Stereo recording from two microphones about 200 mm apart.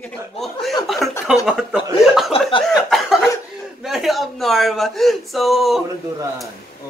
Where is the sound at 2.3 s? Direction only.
30° left (ahead or behind).